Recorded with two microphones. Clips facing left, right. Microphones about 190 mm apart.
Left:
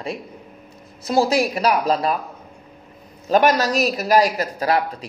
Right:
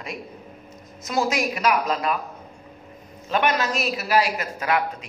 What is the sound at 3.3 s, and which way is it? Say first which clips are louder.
A man's voice: left 6 dB; 40° left (ahead or behind).